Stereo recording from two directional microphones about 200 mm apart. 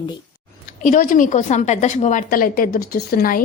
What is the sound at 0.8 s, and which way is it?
A woman's voice, 40° left (ahead or behind).